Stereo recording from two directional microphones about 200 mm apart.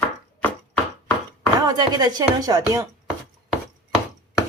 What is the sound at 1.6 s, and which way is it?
Speech, 20° right (ahead or behind).